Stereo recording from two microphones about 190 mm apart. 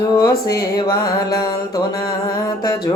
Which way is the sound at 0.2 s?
20° left (ahead or behind).